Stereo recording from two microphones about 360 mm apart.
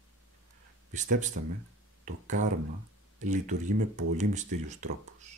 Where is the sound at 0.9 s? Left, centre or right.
Right.